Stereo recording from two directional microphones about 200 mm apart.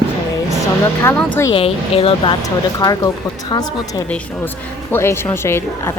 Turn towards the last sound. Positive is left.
turn(degrees=10)  # may be behind; listen again after turning